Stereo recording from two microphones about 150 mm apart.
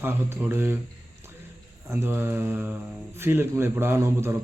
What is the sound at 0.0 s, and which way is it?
Speech, 15° right (ahead or behind).